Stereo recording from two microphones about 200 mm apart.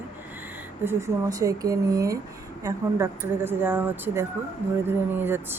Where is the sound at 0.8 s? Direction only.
15° right (ahead or behind).